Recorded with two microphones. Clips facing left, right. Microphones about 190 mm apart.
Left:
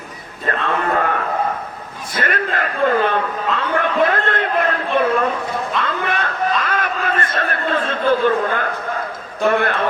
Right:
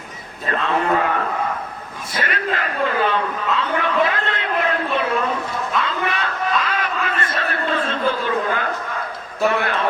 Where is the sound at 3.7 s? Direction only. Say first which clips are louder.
Left 5 dB; 50° left (ahead or behind).